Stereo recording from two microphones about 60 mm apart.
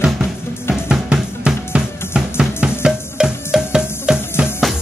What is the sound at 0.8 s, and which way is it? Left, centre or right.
Drum, centre.